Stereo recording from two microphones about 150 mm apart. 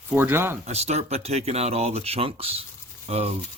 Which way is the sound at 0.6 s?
45° right (ahead or behind).